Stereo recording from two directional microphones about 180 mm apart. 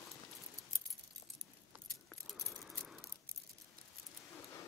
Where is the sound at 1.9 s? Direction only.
Centre (ahead or behind).